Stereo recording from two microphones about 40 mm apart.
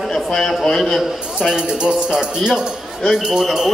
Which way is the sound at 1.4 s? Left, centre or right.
Right.